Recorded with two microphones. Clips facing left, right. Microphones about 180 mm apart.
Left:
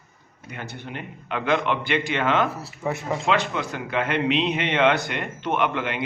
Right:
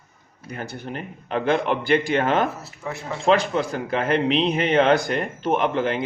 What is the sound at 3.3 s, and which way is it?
A man's voice, 35° right (ahead or behind).